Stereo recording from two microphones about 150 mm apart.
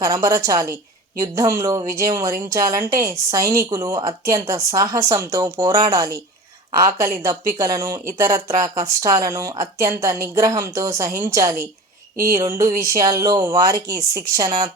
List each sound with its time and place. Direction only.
0.0 s speech: 20° right (ahead or behind)
12.1 s a sound: 75° right (ahead or behind)
12.4 s speech: 20° right (ahead or behind)
13.9 s speech: 90° right